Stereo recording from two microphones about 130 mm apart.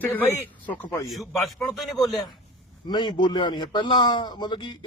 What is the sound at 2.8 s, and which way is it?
A man's voice, 35° left (ahead or behind).